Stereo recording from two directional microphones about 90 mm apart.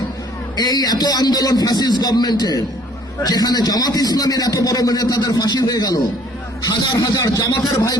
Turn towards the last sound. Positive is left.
turn(degrees=40)  # may be behind; listen again after turning